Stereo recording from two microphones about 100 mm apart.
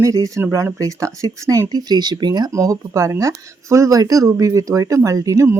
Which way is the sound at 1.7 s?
40° right (ahead or behind).